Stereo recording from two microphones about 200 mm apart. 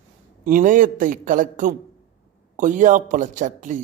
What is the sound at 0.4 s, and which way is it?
A man's voice, 40° right (ahead or behind).